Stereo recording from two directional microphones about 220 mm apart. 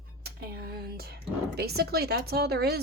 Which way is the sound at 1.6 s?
45° right (ahead or behind).